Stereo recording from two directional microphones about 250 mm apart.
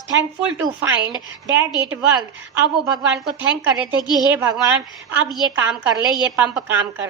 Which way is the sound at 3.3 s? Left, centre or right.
Centre.